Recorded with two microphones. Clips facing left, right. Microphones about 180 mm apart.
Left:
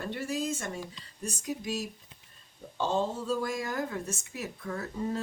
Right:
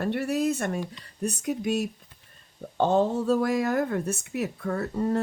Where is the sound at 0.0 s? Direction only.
65° right (ahead or behind).